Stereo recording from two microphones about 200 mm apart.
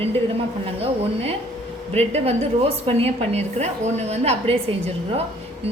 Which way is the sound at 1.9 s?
30° right (ahead or behind).